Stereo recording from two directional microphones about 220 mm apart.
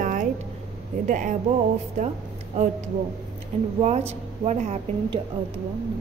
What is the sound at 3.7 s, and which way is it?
A woman's voice, 30° right (ahead or behind).